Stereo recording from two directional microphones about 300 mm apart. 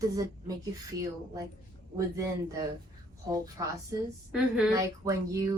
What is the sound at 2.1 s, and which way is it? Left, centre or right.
A woman's voice, centre.